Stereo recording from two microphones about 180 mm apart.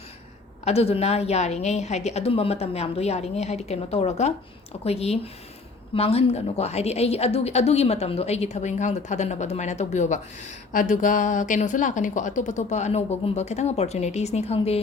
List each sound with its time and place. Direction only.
0.6 s a woman's voice: 35° left (ahead or behind)